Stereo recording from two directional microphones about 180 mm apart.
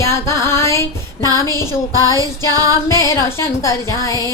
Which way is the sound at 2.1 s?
20° right (ahead or behind).